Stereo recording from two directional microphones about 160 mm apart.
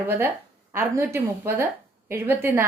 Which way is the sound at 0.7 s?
15° right (ahead or behind).